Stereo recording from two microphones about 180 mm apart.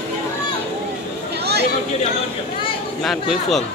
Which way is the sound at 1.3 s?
65° right (ahead or behind).